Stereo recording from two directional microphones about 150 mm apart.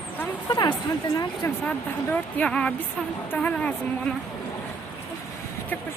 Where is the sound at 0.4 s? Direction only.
25° left (ahead or behind).